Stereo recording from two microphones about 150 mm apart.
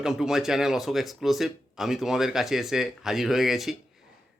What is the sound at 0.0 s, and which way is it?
Speech, 5° right (ahead or behind).